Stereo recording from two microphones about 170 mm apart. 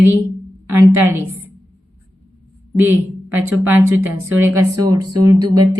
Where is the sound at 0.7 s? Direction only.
15° right (ahead or behind).